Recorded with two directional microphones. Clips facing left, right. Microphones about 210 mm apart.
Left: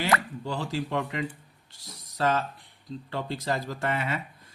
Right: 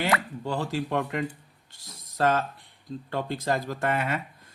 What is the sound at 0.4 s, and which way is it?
Speech, 55° right (ahead or behind).